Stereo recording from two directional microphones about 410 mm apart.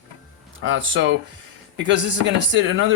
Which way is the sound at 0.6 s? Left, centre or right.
Right.